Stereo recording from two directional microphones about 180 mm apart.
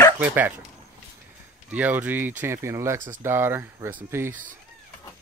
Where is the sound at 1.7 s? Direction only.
10° right (ahead or behind).